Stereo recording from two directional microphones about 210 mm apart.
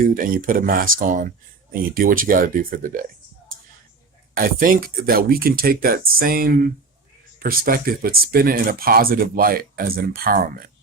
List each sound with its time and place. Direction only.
0.0 s speech: 40° right (ahead or behind)
4.4 s speech: 40° right (ahead or behind)